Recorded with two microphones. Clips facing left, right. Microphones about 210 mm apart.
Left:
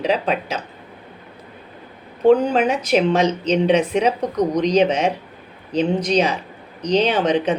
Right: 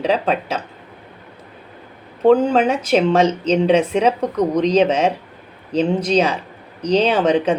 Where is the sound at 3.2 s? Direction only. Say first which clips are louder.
Right 2 dB; 30° right (ahead or behind).